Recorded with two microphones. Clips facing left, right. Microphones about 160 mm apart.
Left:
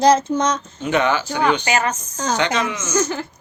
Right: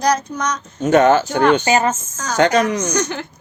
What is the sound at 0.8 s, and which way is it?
Speech, 45° right (ahead or behind).